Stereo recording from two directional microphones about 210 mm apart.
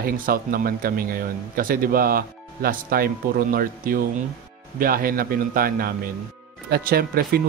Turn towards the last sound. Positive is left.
turn(degrees=-45)  # may be behind; listen again after turning